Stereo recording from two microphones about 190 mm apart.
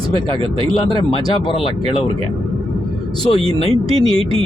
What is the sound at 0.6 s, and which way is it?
Speech, 25° right (ahead or behind).